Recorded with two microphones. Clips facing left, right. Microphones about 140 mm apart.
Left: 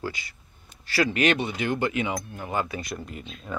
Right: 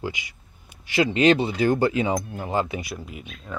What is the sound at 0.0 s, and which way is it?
Speech, 15° right (ahead or behind).